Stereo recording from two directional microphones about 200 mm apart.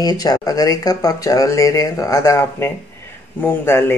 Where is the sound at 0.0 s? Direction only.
20° left (ahead or behind).